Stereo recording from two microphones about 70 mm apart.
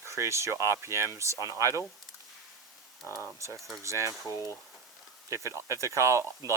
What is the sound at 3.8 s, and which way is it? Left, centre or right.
Speech, right.